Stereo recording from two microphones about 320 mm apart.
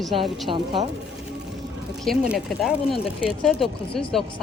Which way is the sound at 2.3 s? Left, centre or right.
Centre.